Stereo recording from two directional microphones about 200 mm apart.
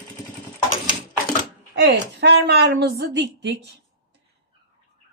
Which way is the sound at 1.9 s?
55° right (ahead or behind).